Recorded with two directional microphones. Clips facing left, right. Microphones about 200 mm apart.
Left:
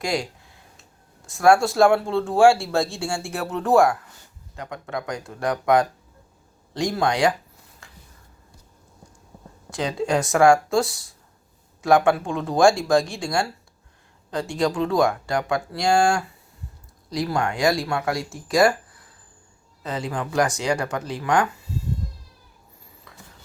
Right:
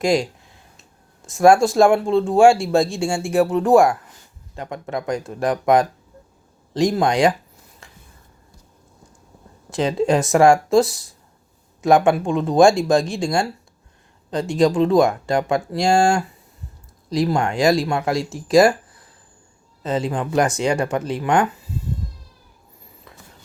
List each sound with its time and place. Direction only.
1.4 s speech: 20° right (ahead or behind)
9.7 s speech: 25° right (ahead or behind)
19.8 s speech: 25° right (ahead or behind)